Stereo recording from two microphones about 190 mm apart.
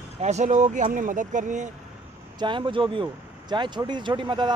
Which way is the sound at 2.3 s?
25° right (ahead or behind).